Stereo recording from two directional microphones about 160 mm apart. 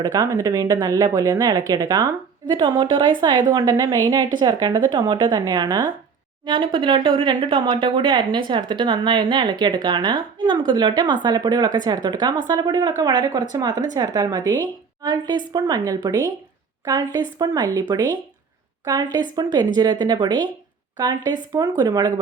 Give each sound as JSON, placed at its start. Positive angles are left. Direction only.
{"t": 0.0, "sound": "speech", "side_deg": -20}